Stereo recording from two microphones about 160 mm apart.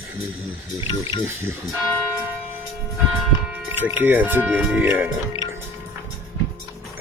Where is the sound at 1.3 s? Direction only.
15° right (ahead or behind).